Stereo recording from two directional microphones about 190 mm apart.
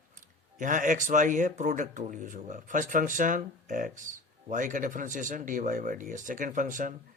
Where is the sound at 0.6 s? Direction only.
45° right (ahead or behind).